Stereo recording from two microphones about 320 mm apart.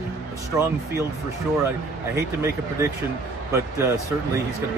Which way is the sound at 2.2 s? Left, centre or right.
Centre.